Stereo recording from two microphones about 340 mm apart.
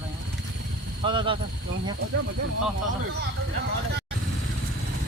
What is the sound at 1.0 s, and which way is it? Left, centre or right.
Speech, centre.